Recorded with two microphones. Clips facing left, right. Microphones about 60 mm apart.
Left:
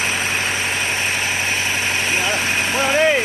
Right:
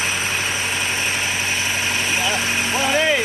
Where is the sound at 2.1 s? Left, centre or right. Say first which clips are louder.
Left 1 dB; left.